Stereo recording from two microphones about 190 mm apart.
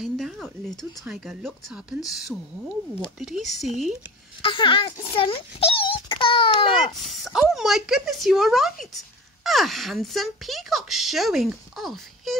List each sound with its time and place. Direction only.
0.0 s speech: centre (ahead or behind)
4.4 s a child's voice: 25° left (ahead or behind)
7.1 s speech: centre (ahead or behind)